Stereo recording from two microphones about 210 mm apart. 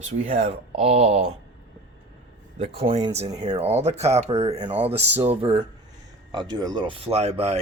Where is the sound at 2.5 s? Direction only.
25° right (ahead or behind).